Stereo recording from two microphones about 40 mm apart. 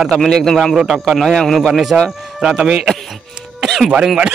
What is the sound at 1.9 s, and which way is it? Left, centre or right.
A man's voice, centre.